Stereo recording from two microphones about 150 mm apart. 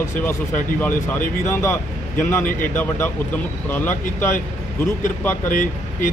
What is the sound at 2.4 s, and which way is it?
Speech, 65° left (ahead or behind).